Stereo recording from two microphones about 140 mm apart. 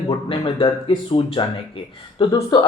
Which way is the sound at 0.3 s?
40° left (ahead or behind).